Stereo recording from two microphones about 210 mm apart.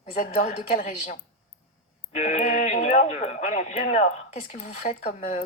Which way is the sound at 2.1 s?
30° left (ahead or behind).